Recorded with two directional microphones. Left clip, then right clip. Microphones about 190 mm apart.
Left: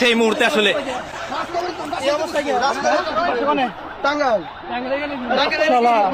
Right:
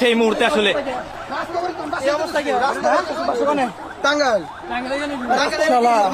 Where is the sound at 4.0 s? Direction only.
40° right (ahead or behind).